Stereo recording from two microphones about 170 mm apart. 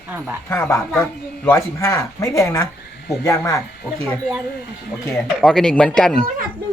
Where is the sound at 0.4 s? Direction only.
15° left (ahead or behind).